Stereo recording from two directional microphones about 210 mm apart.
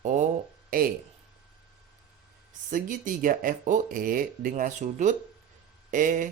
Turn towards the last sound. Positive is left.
turn(degrees=-40)  # may be behind; listen again after turning